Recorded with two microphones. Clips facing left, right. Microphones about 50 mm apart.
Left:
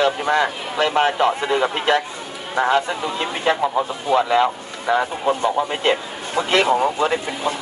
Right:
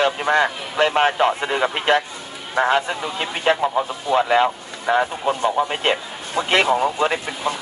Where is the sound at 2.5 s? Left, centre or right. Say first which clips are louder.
Even; centre.